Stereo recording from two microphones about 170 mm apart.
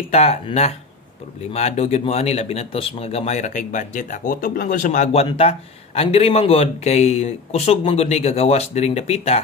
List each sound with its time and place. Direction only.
0.1 s speech: 40° left (ahead or behind)